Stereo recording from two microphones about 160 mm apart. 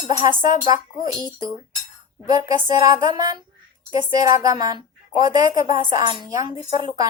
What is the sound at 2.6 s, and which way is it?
A woman's voice, 25° right (ahead or behind).